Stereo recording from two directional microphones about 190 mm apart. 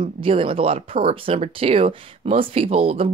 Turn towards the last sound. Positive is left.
turn(degrees=-30)  # may be behind; listen again after turning